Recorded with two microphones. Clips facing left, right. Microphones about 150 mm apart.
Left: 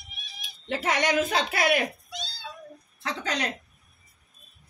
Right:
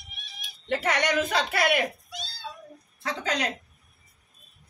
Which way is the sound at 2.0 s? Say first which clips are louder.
Left 2 dB; 5° right (ahead or behind).